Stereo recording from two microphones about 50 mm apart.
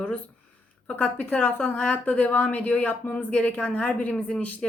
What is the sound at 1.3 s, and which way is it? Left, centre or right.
A woman's voice, left.